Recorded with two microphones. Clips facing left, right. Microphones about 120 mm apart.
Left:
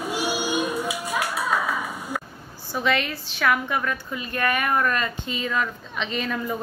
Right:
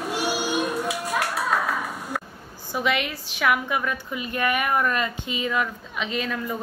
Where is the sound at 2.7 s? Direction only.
15° right (ahead or behind).